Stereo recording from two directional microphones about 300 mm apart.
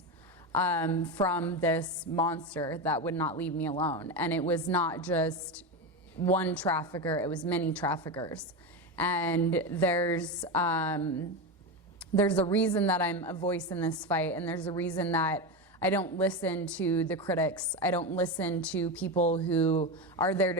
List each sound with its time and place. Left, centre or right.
0.5 s a woman's voice: centre
3.7 s speech: centre
4.0 s a woman's voice: centre
11.9 s a sound: centre
12.5 s a woman's voice: centre
19.1 s speech: left
19.5 s a woman's voice: centre